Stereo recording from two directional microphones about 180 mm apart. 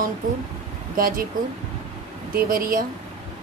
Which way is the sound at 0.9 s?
50° right (ahead or behind).